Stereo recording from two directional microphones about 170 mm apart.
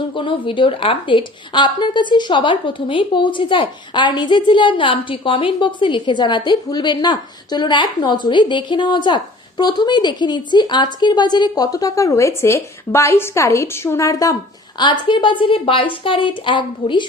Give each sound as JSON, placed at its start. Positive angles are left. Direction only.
{"t": 0.1, "sound": "a woman's voice", "side_deg": 30}